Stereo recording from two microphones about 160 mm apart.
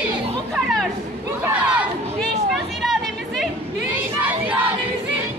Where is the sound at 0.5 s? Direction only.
5° left (ahead or behind).